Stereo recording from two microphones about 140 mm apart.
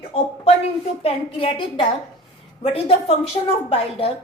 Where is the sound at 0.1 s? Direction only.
50° left (ahead or behind).